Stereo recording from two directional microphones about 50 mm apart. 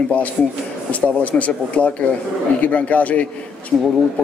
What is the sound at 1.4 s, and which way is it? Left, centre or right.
Speech, left.